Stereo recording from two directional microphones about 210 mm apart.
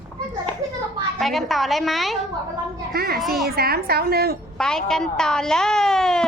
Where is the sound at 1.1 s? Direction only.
Centre (ahead or behind).